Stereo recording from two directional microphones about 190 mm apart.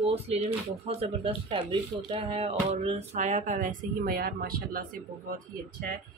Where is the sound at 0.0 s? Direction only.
30° right (ahead or behind); by 4.8 s 50° right (ahead or behind).